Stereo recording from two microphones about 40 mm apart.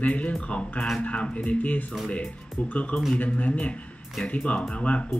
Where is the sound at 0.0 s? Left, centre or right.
Left.